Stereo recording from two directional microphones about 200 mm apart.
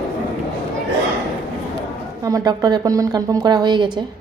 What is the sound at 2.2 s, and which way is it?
A woman's voice, 20° right (ahead or behind).